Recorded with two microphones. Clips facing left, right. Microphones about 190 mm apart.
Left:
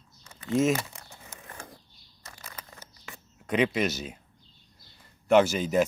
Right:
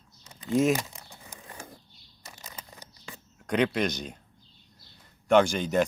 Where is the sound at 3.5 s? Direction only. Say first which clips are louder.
Even; 5° left (ahead or behind).